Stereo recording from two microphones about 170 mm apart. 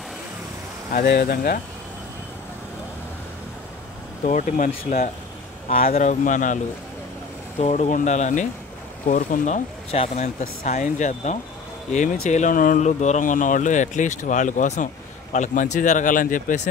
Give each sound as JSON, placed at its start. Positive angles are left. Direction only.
{"t": 1.0, "sound": "speech", "side_deg": 65}
{"t": 4.2, "sound": "speech", "side_deg": 50}
{"t": 9.8, "sound": "speech", "side_deg": 40}